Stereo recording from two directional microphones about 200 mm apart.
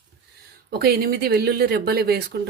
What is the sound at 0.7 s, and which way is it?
Speech, 50° right (ahead or behind).